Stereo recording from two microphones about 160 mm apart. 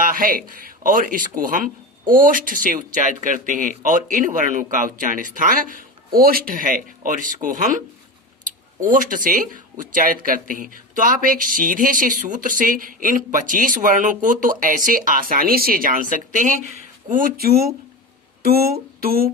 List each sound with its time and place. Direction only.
0.0 s speech: 60° right (ahead or behind)
8.8 s speech: 55° right (ahead or behind)
18.4 s a sound: 70° right (ahead or behind)